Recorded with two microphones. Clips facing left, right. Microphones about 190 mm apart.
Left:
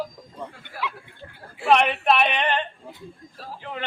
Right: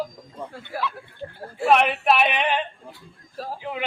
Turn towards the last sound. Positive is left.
turn(degrees=-10)  # may be behind; listen again after turning